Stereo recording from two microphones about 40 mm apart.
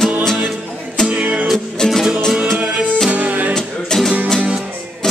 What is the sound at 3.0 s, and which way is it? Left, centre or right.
Music, right.